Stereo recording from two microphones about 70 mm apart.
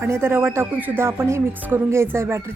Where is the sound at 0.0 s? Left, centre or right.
Right.